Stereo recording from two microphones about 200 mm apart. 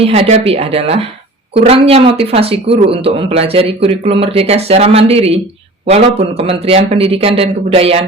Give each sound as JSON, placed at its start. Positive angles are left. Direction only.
{"t": 0.0, "sound": "speech", "side_deg": -30}